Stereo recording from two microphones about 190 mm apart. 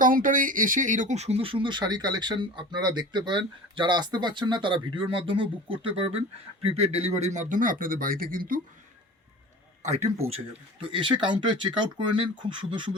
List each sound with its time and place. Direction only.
0.0 s speech: 45° right (ahead or behind)
9.8 s a man's voice: 35° right (ahead or behind)